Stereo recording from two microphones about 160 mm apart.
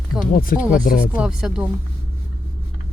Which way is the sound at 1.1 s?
5° right (ahead or behind).